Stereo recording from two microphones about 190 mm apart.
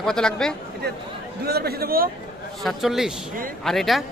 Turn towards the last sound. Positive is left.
turn(degrees=0)  # may be behind; listen again after turning